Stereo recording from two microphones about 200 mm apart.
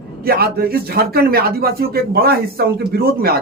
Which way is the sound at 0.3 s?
50° right (ahead or behind).